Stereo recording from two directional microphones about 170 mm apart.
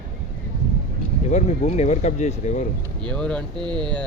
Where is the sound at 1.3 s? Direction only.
40° left (ahead or behind).